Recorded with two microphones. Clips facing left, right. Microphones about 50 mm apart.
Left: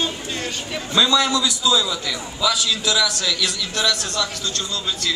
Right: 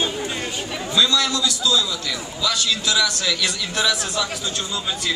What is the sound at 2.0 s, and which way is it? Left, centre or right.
A man's voice, centre.